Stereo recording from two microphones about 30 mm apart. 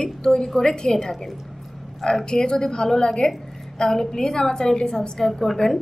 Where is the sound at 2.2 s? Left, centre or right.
Left.